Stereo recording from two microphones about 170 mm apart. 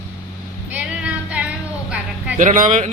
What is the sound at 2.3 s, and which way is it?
Speech, 50° right (ahead or behind).